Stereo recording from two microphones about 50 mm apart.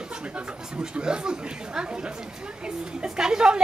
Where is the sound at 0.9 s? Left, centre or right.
Centre.